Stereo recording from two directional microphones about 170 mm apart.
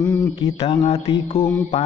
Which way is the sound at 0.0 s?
20° left (ahead or behind).